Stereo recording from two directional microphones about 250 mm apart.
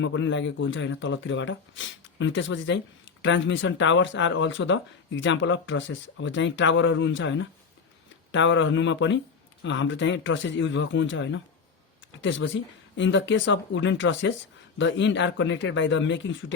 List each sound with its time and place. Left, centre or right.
0.0 s speech: left